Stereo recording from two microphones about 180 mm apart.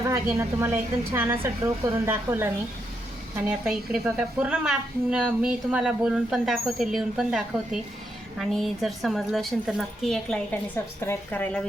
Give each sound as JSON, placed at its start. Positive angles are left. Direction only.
{"t": 0.0, "sound": "a woman's voice", "side_deg": -15}